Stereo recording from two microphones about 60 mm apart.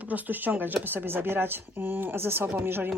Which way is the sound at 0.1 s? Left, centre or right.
Right.